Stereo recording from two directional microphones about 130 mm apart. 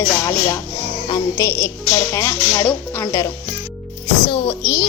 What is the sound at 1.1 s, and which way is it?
A woman's voice, 30° left (ahead or behind).